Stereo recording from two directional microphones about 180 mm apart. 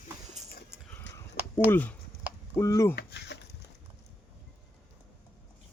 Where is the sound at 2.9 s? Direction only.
70° left (ahead or behind).